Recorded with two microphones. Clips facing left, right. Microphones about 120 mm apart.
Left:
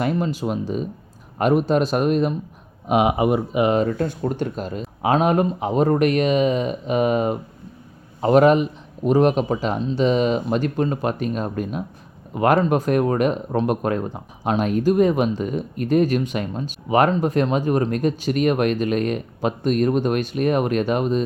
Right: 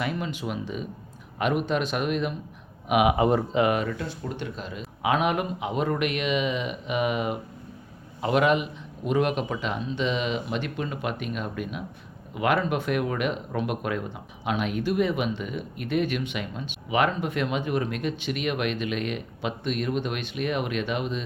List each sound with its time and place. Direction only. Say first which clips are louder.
0.0 s speech: left 7 dB; 40° left (ahead or behind)
3.2 s speech: left 3 dB; 15° left (ahead or behind)
3.7 s speech: left 7 dB; 35° left (ahead or behind)